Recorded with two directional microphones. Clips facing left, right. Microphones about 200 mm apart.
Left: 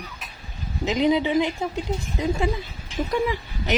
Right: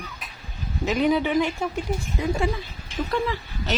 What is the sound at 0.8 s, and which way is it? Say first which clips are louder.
Speech: left 1 dB; 20° left (ahead or behind).